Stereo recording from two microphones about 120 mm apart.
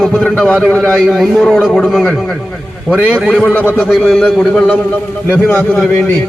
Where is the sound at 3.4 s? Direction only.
15° left (ahead or behind).